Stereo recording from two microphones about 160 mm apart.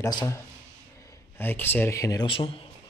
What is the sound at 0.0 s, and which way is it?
Speech, 20° left (ahead or behind).